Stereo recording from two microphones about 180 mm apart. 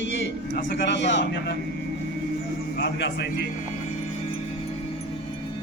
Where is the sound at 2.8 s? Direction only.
70° left (ahead or behind).